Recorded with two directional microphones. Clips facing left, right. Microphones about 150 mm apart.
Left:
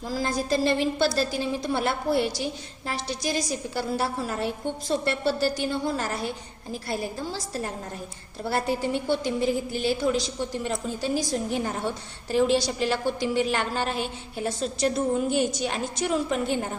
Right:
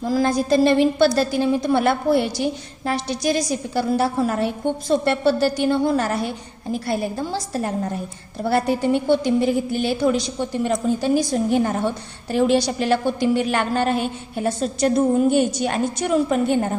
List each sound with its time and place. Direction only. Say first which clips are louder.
0.1 s a woman's voice: right 7 dB; 70° right (ahead or behind)